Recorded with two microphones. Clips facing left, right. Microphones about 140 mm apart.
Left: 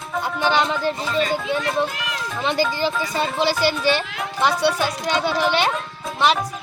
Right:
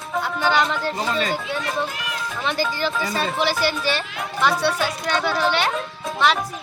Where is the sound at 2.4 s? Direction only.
20° left (ahead or behind).